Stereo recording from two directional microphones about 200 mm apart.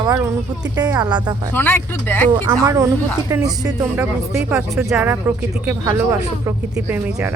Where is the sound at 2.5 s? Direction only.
15° right (ahead or behind).